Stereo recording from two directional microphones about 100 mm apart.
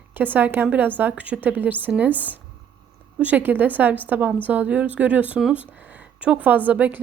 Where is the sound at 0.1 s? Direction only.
20° right (ahead or behind).